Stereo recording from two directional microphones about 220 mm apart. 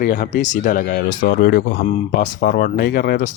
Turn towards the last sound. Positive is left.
turn(degrees=40)  # may be behind; listen again after turning